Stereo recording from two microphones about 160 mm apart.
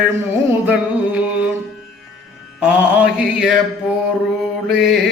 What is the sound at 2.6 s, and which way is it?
Mantra, 5° right (ahead or behind).